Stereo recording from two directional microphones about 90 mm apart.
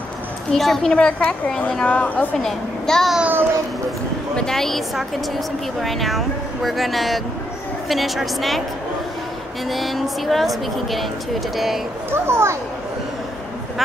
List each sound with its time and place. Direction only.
0.5 s a woman's voice: 5° left (ahead or behind)
2.3 s speech: 5° left (ahead or behind)
3.2 s a child's voice: 20° right (ahead or behind)
4.4 s speech: 5° left (ahead or behind)
9.7 s speech: centre (ahead or behind)
12.1 s a child's voice: 30° right (ahead or behind)